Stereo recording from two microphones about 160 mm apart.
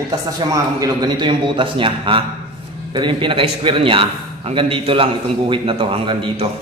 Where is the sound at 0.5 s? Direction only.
25° right (ahead or behind).